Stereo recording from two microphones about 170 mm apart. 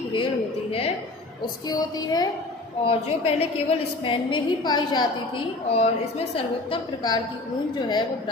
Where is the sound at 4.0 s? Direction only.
30° left (ahead or behind).